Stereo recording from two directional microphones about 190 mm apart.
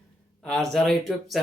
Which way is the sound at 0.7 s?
Centre (ahead or behind).